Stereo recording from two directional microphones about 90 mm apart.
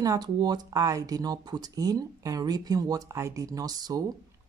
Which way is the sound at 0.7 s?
35° right (ahead or behind).